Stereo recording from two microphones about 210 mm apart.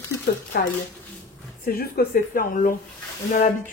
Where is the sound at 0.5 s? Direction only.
45° left (ahead or behind).